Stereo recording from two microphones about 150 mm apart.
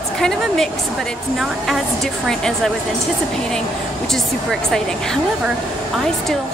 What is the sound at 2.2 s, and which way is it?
Speech, 5° left (ahead or behind).